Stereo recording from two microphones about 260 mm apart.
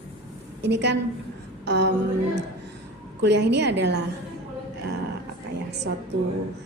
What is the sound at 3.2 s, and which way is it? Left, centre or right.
Speech, right.